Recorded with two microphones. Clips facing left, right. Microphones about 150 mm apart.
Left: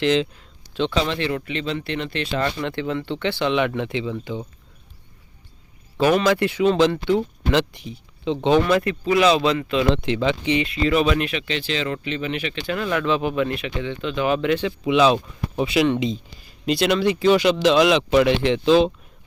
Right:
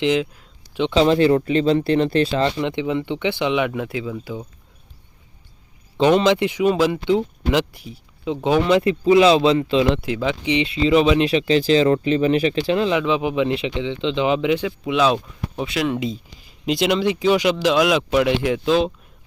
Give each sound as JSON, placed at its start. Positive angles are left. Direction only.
{"t": 0.0, "sound": "speech", "side_deg": -10}
{"t": 0.9, "sound": "speech", "side_deg": -35}
{"t": 2.6, "sound": "speech", "side_deg": -15}
{"t": 6.0, "sound": "speech", "side_deg": -20}
{"t": 8.6, "sound": "speech", "side_deg": -25}
{"t": 9.9, "sound": "speech", "side_deg": -5}
{"t": 10.8, "sound": "speech", "side_deg": -25}
{"t": 14.8, "sound": "speech", "side_deg": 0}
{"t": 16.6, "sound": "speech", "side_deg": -15}